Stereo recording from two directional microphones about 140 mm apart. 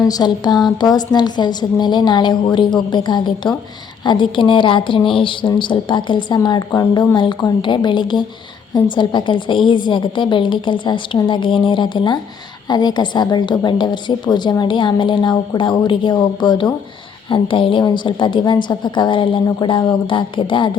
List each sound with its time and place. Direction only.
0.0 s a woman's voice: 30° left (ahead or behind)